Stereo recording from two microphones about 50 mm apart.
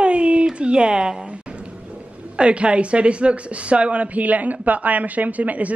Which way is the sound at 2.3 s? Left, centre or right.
Right.